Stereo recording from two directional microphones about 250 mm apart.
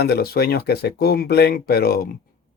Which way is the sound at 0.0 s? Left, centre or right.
Left.